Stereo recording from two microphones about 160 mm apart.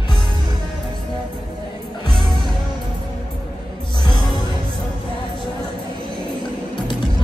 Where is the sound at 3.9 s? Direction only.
25° left (ahead or behind).